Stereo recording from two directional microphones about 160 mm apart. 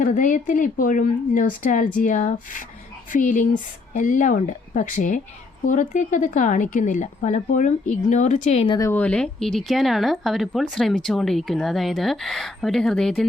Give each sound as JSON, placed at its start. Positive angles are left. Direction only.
{"t": 0.0, "sound": "speech", "side_deg": 55}
{"t": 8.7, "sound": "speech", "side_deg": 20}
{"t": 9.0, "sound": "speech", "side_deg": 5}